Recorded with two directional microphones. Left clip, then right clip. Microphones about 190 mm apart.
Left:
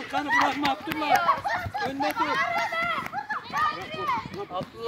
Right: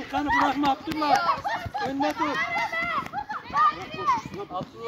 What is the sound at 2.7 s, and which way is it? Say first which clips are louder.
Run: even; 45° left (ahead or behind).